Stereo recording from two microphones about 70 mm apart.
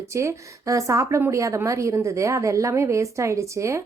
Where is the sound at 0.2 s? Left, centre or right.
Right.